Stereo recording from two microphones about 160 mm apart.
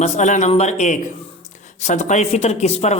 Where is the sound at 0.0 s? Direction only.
50° left (ahead or behind).